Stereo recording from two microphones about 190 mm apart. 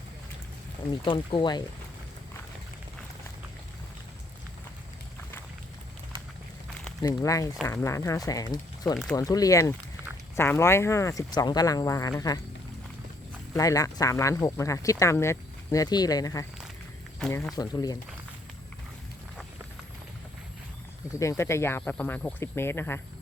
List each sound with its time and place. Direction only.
1.0 s speech: 25° left (ahead or behind)
7.0 s speech: 20° left (ahead or behind)
13.5 s speech: 15° left (ahead or behind)
17.2 s speech: 5° left (ahead or behind)
17.5 s speech: 20° left (ahead or behind)
21.2 s speech: 15° left (ahead or behind)